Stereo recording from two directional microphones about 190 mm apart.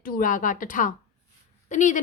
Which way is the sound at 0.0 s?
45° left (ahead or behind).